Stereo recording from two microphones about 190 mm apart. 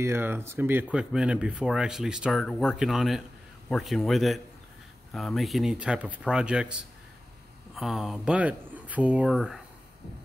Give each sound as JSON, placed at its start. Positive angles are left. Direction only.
{"t": 0.0, "sound": "speech", "side_deg": -10}